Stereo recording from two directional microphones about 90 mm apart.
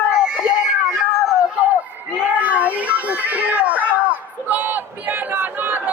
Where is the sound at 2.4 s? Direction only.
15° right (ahead or behind).